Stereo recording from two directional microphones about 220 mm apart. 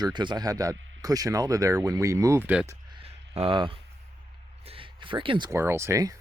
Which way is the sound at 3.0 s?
25° right (ahead or behind).